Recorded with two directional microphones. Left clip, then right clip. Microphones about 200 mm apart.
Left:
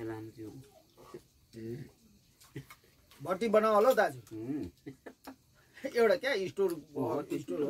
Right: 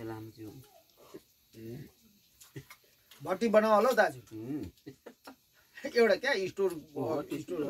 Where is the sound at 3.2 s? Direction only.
35° left (ahead or behind).